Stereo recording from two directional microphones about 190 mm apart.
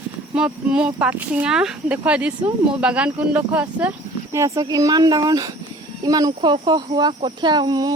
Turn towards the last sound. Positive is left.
turn(degrees=-20)  # may be behind; listen again after turning